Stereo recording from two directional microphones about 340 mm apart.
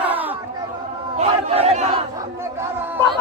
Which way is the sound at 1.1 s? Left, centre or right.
Centre.